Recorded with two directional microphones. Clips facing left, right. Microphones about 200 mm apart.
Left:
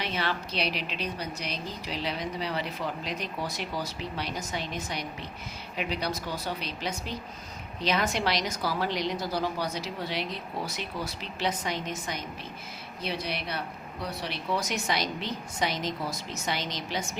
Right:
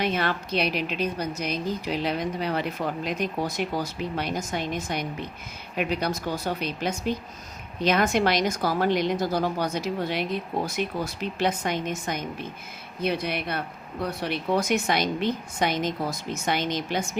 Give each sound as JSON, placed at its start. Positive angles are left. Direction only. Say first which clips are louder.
{"t": 0.0, "sound": "a woman's voice", "louder": "right 5 dB", "side_deg": -50}